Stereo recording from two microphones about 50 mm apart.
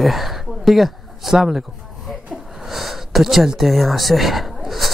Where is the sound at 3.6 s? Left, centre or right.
Centre.